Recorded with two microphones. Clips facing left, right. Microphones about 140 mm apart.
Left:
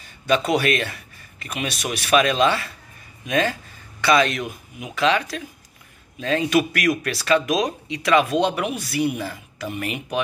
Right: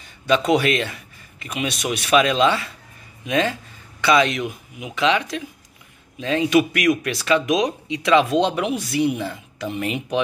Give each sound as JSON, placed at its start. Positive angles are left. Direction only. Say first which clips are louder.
{"t": 0.3, "sound": "a man's voice", "louder": "right 2 dB", "side_deg": -20}